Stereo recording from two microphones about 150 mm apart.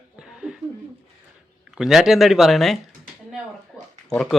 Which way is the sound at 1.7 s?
5° right (ahead or behind).